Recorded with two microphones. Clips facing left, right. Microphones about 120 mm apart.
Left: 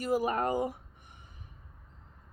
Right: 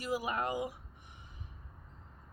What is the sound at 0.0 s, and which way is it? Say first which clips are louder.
Speech: left 6 dB; 45° left (ahead or behind).